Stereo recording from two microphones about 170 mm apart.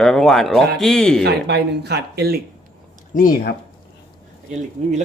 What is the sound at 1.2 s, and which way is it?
Speech, 75° right (ahead or behind).